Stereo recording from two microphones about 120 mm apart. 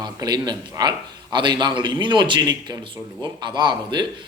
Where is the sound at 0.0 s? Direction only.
35° right (ahead or behind).